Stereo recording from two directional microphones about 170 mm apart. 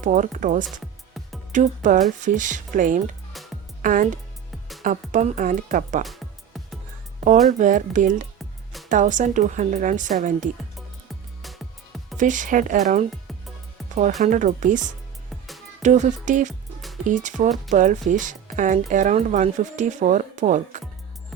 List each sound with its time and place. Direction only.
0.0 s speech: 50° right (ahead or behind)
3.3 s music: centre (ahead or behind)
3.8 s speech: 50° right (ahead or behind)
6.1 s music: centre (ahead or behind)
7.6 s speech: 50° right (ahead or behind)
10.8 s music: centre (ahead or behind)
12.1 s speech: 50° right (ahead or behind)
14.2 s speech: 45° right (ahead or behind)